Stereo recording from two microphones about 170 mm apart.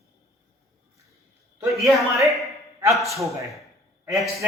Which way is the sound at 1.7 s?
Centre (ahead or behind).